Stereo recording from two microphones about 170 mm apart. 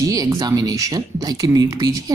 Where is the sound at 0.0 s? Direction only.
20° right (ahead or behind).